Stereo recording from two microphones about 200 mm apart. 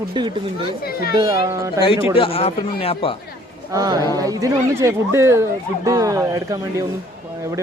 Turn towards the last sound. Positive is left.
turn(degrees=-15)  # may be behind; listen again after turning